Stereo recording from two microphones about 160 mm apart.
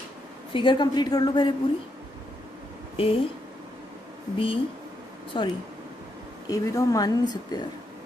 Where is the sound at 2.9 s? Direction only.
35° left (ahead or behind).